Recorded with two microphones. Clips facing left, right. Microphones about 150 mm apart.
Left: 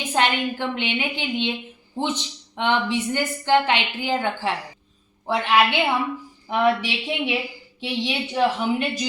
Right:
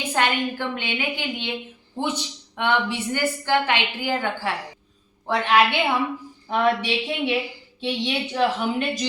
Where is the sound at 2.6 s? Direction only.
20° left (ahead or behind).